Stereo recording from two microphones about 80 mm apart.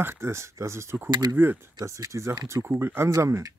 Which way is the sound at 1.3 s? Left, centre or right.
Right.